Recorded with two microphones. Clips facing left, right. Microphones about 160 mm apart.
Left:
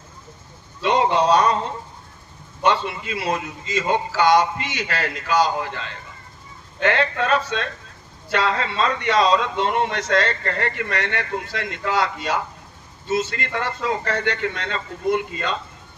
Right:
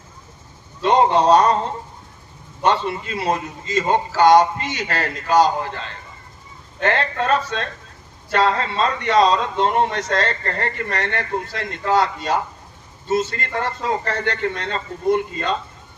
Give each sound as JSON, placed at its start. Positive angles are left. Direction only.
{"t": 0.8, "sound": "a man's voice", "side_deg": -40}
{"t": 2.6, "sound": "a man's voice", "side_deg": -40}
{"t": 6.8, "sound": "a man's voice", "side_deg": -40}